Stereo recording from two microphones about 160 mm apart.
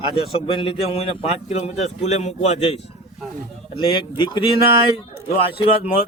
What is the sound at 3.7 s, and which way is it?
Speech, 30° left (ahead or behind).